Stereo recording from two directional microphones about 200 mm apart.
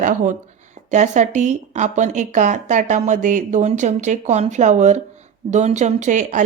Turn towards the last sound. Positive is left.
turn(degrees=-40)  # may be behind; listen again after turning